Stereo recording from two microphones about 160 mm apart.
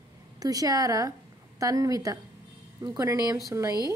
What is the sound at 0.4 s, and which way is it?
Speech, 25° right (ahead or behind).